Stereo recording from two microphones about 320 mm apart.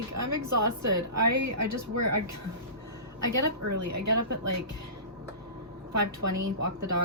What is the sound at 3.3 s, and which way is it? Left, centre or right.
Speech, right.